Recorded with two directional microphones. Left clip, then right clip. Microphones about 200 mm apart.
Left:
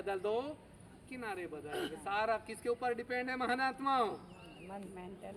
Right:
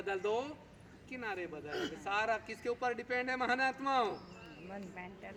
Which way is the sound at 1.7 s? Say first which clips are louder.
Even; 50° right (ahead or behind).